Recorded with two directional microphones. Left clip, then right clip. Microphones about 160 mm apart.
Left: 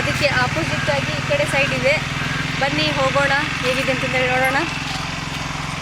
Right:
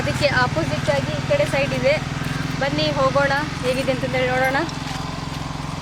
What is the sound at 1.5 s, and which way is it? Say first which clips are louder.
Speech: left 2 dB; 5° left (ahead or behind).